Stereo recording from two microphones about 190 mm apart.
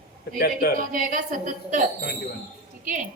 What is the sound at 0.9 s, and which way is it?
Speech, 45° right (ahead or behind).